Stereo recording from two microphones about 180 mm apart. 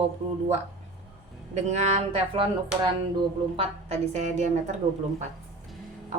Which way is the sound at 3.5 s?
35° right (ahead or behind).